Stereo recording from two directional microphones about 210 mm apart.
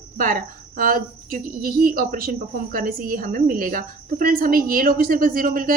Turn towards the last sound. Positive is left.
turn(degrees=-40)  # may be behind; listen again after turning